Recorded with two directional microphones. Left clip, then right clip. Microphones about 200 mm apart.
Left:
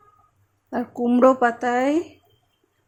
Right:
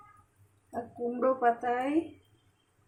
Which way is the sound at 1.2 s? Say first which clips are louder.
Left 9 dB; 60° left (ahead or behind).